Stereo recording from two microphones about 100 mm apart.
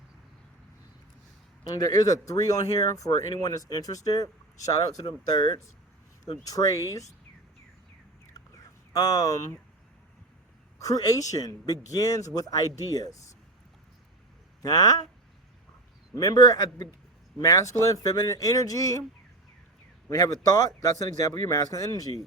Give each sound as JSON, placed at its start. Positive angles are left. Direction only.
{"t": 1.6, "sound": "speech", "side_deg": 40}
{"t": 6.4, "sound": "speech", "side_deg": 35}
{"t": 8.9, "sound": "speech", "side_deg": 40}
{"t": 10.8, "sound": "speech", "side_deg": 35}
{"t": 14.6, "sound": "speech", "side_deg": 40}
{"t": 16.1, "sound": "speech", "side_deg": 35}
{"t": 20.1, "sound": "speech", "side_deg": 35}